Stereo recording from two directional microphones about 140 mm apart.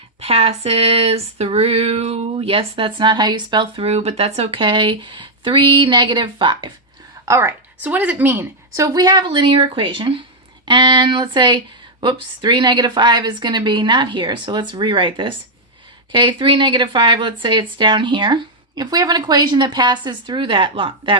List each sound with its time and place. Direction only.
0.2 s female singing: 45° right (ahead or behind)
7.3 s a woman's voice: 20° right (ahead or behind); by 10.2 s 35° right (ahead or behind)
10.7 s female singing: 35° right (ahead or behind)